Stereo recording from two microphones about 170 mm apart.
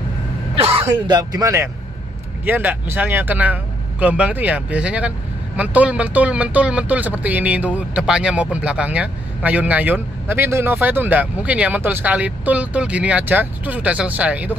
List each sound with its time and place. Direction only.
0.8 s speech: 25° right (ahead or behind)